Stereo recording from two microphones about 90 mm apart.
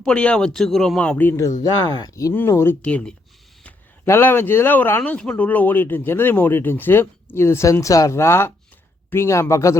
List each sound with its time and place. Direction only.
0.0 s speech: 10° left (ahead or behind)
1.2 s speech: 20° left (ahead or behind)
1.5 s speech: 45° left (ahead or behind)
2.5 s speech: 30° left (ahead or behind)
2.8 s speech: 10° left (ahead or behind)
4.0 s speech: 25° left (ahead or behind)